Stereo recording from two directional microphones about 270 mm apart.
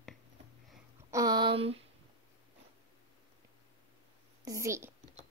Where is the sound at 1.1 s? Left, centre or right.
Centre.